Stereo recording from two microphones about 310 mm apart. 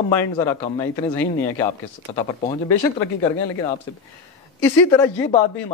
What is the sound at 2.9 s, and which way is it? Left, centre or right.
A man's voice, centre.